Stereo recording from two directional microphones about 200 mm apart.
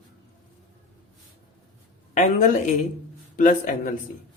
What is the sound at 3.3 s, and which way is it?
Speech, 40° left (ahead or behind).